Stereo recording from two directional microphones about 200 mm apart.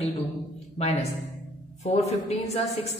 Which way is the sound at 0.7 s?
30° left (ahead or behind).